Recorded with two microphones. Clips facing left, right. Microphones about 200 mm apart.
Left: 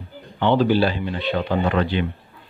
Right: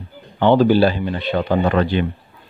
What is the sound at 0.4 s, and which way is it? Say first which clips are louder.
A man's voice: right 4 dB; 45° right (ahead or behind).